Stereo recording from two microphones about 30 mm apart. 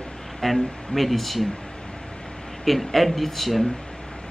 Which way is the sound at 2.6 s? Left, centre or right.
Centre.